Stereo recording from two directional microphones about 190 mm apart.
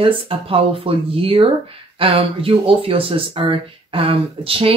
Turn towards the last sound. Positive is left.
turn(degrees=-30)  # may be behind; listen again after turning